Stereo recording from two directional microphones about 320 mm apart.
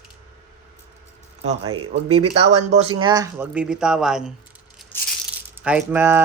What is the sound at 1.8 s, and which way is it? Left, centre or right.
Speech, right.